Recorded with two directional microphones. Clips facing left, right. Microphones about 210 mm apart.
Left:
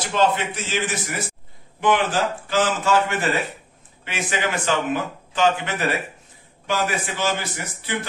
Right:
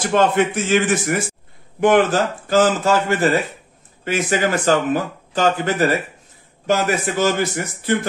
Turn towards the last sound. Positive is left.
turn(degrees=-45)  # may be behind; listen again after turning